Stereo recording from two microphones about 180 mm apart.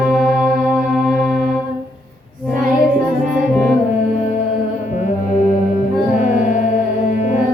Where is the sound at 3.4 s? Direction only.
5° right (ahead or behind).